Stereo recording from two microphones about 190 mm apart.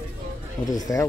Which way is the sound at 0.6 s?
20° left (ahead or behind).